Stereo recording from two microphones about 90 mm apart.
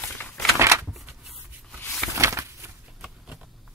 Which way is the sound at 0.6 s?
30° right (ahead or behind).